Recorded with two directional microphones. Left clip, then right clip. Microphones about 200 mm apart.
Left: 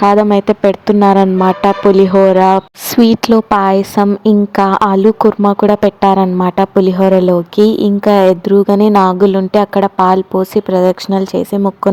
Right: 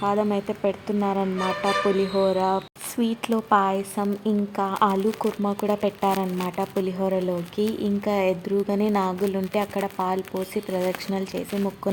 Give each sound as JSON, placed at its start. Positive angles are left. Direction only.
{"t": 0.0, "sound": "speech", "side_deg": 40}